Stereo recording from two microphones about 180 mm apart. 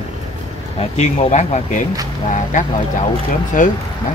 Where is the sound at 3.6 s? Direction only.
45° left (ahead or behind).